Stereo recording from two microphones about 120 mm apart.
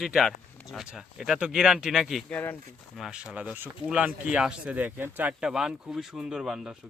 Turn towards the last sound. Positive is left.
turn(degrees=-5)  # may be behind; listen again after turning